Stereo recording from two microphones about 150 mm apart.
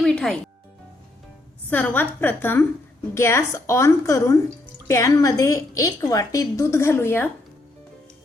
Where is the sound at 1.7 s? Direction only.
15° left (ahead or behind).